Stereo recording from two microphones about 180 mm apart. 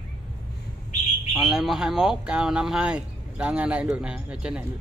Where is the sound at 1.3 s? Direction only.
Centre (ahead or behind).